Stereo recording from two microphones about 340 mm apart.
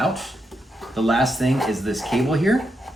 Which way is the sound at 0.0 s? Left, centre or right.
Centre.